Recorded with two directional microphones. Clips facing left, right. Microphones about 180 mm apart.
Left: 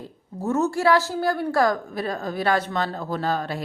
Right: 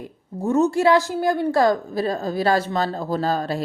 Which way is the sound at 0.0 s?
15° right (ahead or behind).